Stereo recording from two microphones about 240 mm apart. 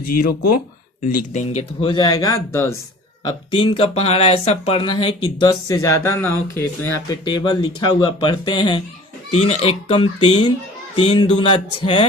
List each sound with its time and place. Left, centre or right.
1.0 s speech: left